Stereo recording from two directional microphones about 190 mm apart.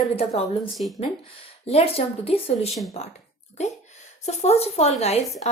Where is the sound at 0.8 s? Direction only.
30° left (ahead or behind).